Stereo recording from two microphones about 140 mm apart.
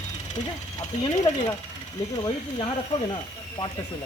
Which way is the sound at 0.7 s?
30° left (ahead or behind).